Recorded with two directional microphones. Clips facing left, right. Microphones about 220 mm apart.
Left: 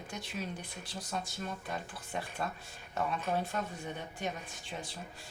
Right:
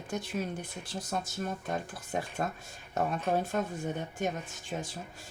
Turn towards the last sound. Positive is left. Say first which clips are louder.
# right 5 dB
turn(degrees=-45)  # may be behind; listen again after turning